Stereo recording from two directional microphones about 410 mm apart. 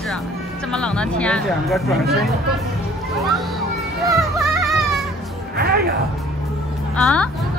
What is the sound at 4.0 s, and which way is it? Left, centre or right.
Music, centre.